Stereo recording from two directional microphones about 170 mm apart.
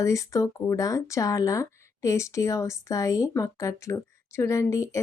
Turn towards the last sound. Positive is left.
turn(degrees=20)  # may be behind; listen again after turning